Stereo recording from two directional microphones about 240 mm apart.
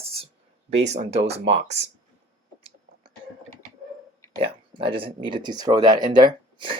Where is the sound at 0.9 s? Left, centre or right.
Right.